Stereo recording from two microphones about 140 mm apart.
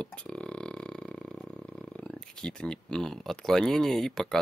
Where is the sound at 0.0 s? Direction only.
5° left (ahead or behind).